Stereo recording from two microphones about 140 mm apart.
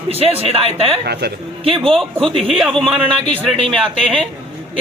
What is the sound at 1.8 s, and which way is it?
Speech, 5° left (ahead or behind).